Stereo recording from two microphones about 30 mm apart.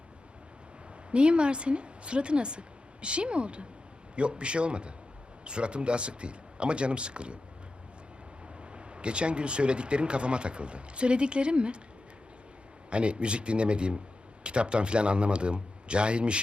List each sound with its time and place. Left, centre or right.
1.1 s speech: right
8.7 s speech: right
12.9 s speech: right